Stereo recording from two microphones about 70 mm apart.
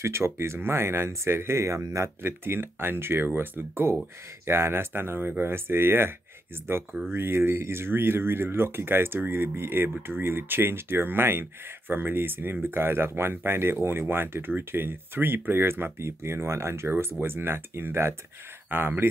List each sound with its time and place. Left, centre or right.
0.0 s speech: right
2.2 s speech: right